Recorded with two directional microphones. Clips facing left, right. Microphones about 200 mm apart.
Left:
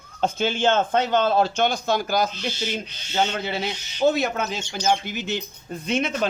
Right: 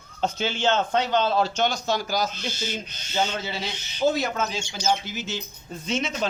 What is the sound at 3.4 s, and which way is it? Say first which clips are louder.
Speech: left 4 dB; 55° left (ahead or behind).